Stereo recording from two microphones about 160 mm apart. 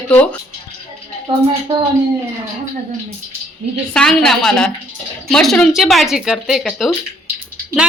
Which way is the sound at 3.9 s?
5° left (ahead or behind).